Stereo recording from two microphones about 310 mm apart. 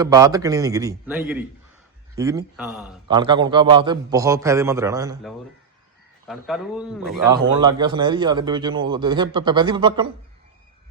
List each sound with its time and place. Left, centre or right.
0.0 s a man's voice: centre
3.1 s a man's voice: centre
6.2 s a man's voice: centre
7.5 s a man's voice: centre